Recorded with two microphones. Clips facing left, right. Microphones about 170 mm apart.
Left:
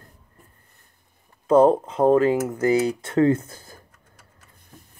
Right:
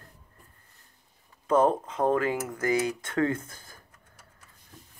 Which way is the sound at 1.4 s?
30° left (ahead or behind).